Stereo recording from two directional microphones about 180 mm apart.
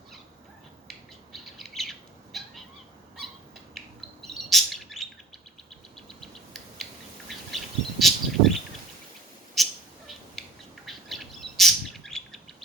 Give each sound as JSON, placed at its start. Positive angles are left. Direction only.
{"t": 0.9, "sound": "cat", "side_deg": 0}
{"t": 3.8, "sound": "bird", "side_deg": 0}
{"t": 6.1, "sound": "bird", "side_deg": 0}
{"t": 9.6, "sound": "bird", "side_deg": 0}
{"t": 10.8, "sound": "bird", "side_deg": 0}